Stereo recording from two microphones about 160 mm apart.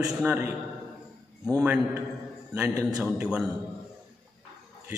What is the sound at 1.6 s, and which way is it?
Speech, 10° right (ahead or behind).